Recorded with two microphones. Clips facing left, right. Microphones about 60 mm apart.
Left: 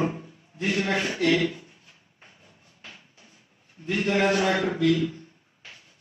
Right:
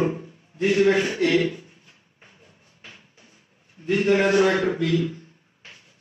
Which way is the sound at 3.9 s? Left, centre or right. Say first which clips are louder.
Right 4 dB; right.